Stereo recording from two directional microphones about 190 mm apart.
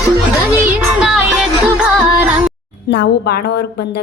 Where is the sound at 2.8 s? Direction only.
60° left (ahead or behind).